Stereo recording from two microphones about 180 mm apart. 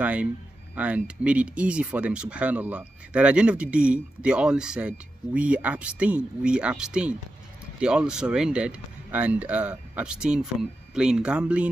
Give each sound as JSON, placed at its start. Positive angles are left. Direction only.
{"t": 0.0, "sound": "speech", "side_deg": -10}